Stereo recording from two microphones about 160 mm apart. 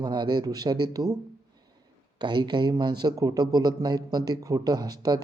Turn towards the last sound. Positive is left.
turn(degrees=-25)  # may be behind; listen again after turning